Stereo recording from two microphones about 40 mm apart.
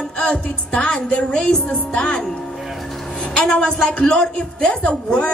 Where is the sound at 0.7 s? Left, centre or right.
Left.